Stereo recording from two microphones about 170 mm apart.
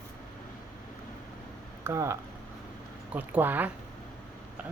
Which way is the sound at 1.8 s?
15° right (ahead or behind).